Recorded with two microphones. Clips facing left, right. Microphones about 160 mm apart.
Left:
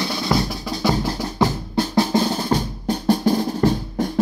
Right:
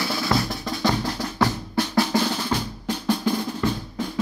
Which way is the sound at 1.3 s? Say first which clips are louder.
Left 3 dB; 20° left (ahead or behind).